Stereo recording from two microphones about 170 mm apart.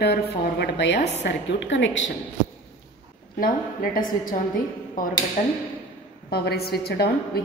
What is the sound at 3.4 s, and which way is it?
Speech, 55° left (ahead or behind).